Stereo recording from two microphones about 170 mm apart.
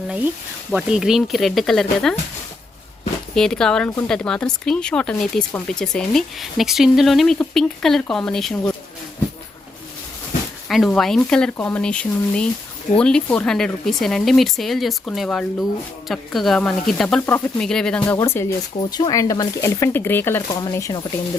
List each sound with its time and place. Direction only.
0.7 s speech: centre (ahead or behind)
3.3 s speech: 5° left (ahead or behind)
10.7 s speech: centre (ahead or behind)
18.8 s speech: 25° left (ahead or behind)